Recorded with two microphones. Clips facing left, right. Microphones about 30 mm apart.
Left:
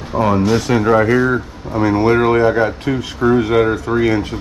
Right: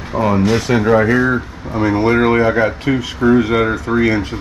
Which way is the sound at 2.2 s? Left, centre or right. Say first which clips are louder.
Even; right.